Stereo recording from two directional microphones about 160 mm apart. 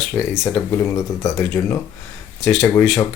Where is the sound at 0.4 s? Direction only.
15° left (ahead or behind).